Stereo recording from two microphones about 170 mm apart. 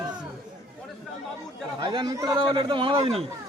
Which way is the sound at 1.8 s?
30° right (ahead or behind).